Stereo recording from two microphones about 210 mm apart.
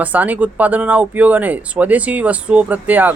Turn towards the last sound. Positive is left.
turn(degrees=-10)  # may be behind; listen again after turning